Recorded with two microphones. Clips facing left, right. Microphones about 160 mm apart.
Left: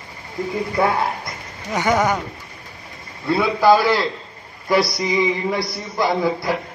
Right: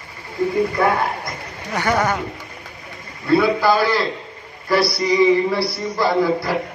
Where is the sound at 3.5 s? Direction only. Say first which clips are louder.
Left 2 dB; 20° left (ahead or behind).